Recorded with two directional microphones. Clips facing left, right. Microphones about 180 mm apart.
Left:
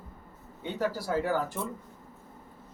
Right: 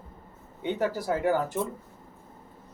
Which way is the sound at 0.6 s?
20° right (ahead or behind).